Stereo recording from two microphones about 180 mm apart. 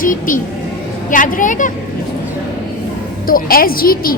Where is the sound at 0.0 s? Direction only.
50° left (ahead or behind).